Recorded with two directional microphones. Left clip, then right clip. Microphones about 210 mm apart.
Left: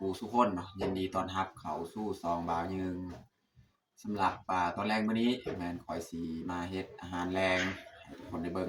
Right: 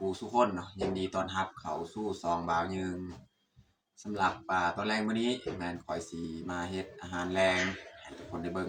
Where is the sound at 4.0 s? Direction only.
5° left (ahead or behind).